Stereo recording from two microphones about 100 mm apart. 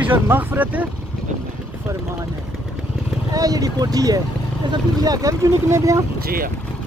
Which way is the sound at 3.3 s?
40° right (ahead or behind).